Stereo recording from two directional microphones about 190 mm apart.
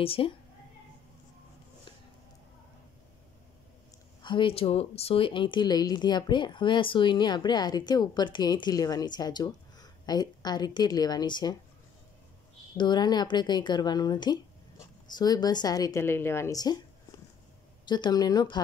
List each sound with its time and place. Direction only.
0.0 s speech: 30° left (ahead or behind)
4.2 s speech: 25° left (ahead or behind)
12.7 s speech: 25° left (ahead or behind)
17.8 s speech: 25° left (ahead or behind)